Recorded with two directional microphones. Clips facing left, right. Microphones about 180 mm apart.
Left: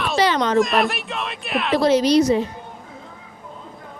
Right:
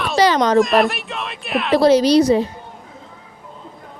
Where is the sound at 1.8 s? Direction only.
35° right (ahead or behind).